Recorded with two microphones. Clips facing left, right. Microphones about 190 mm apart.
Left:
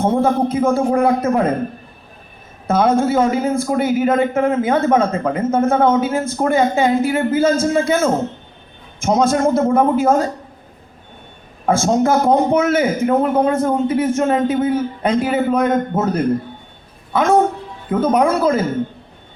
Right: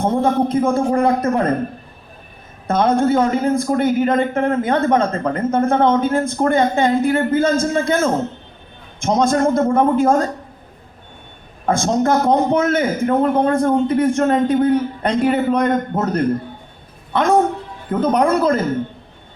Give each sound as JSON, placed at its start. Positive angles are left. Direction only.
{"t": 0.1, "sound": "a man's voice", "side_deg": 5}
{"t": 2.6, "sound": "a man's voice", "side_deg": 5}
{"t": 11.6, "sound": "a man's voice", "side_deg": 5}